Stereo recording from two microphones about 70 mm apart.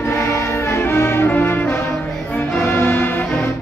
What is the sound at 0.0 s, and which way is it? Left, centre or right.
Music, left.